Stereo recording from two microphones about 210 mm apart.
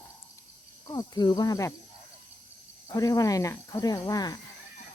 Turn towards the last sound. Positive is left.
turn(degrees=15)  # may be behind; listen again after turning